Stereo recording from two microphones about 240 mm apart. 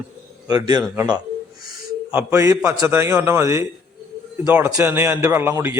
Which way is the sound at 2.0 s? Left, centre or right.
Centre.